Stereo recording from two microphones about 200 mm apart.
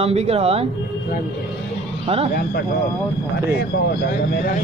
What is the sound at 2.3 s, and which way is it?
Speech, 50° left (ahead or behind).